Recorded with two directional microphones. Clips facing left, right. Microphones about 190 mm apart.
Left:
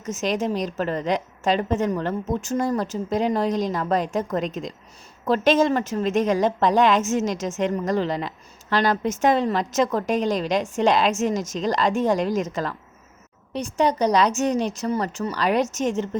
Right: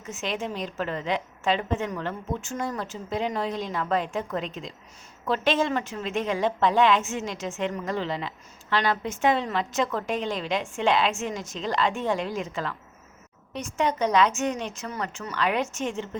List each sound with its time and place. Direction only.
0.0 s a woman's voice: 40° left (ahead or behind)